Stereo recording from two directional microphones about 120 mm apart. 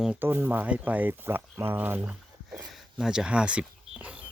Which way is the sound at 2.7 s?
5° right (ahead or behind).